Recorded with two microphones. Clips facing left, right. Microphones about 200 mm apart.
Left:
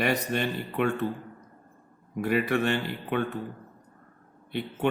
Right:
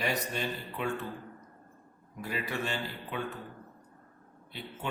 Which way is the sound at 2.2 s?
65° left (ahead or behind).